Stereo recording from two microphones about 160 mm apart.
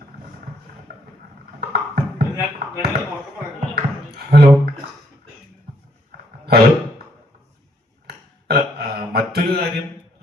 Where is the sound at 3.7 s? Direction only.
80° right.